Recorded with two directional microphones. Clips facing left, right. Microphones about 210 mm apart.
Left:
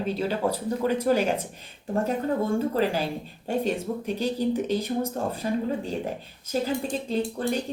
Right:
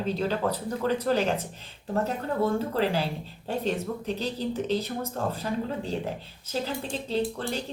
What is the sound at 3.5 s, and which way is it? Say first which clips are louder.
Speech: left 2 dB; 10° left (ahead or behind).